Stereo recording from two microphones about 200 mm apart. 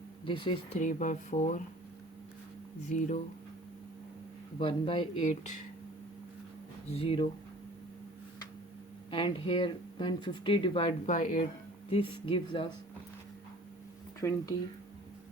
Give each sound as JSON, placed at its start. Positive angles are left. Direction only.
{"t": 0.3, "sound": "speech", "side_deg": 25}
{"t": 0.8, "sound": "speech", "side_deg": 40}
{"t": 2.9, "sound": "speech", "side_deg": 35}
{"t": 4.5, "sound": "speech", "side_deg": 25}
{"t": 6.9, "sound": "speech", "side_deg": 30}
{"t": 9.0, "sound": "speech", "side_deg": 25}
{"t": 11.9, "sound": "speech", "side_deg": 25}
{"t": 14.2, "sound": "speech", "side_deg": 15}